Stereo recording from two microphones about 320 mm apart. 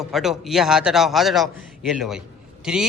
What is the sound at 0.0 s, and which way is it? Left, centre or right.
A man's voice, centre.